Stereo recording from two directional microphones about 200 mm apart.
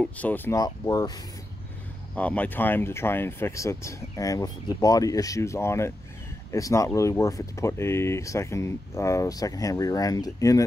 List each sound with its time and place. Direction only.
0.0 s speech: 10° left (ahead or behind)
2.1 s speech: 5° left (ahead or behind)